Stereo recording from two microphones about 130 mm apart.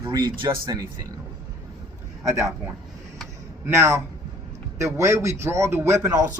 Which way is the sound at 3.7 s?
20° right (ahead or behind).